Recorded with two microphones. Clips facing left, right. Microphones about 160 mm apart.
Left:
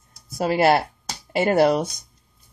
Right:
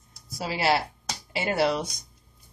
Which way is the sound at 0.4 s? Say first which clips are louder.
Left 7 dB; 55° left (ahead or behind).